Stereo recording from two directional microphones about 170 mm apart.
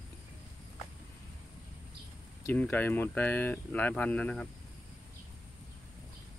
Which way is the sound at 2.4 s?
10° left (ahead or behind).